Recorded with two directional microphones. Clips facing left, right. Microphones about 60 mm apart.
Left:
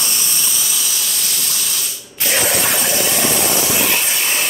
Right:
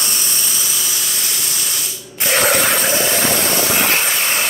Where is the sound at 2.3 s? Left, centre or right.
Right.